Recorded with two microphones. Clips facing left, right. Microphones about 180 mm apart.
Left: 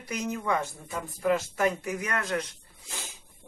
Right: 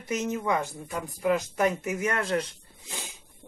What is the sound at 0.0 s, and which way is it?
Speech, 25° right (ahead or behind).